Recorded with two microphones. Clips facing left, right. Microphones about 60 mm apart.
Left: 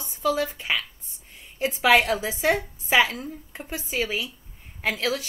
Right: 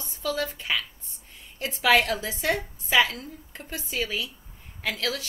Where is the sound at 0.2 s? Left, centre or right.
Centre.